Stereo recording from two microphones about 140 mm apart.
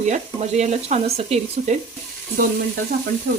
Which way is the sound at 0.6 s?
50° right (ahead or behind).